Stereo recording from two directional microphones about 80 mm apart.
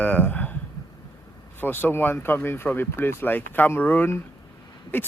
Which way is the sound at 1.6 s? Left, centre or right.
Left.